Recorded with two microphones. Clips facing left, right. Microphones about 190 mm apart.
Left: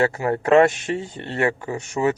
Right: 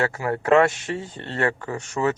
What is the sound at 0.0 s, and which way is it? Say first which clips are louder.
A man's voice: left 4 dB; 20° left (ahead or behind).